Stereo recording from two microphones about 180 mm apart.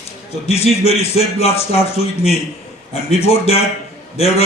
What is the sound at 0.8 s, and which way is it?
Speech, 35° left (ahead or behind).